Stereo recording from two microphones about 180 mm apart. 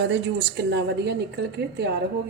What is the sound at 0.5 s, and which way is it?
Speech, 70° right (ahead or behind).